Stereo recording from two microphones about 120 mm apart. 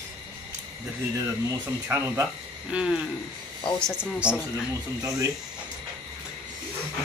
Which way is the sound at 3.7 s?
5° left (ahead or behind).